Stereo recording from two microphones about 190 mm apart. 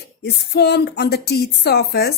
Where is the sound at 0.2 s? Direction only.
60° left (ahead or behind).